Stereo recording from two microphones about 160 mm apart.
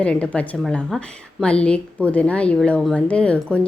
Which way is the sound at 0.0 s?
10° left (ahead or behind).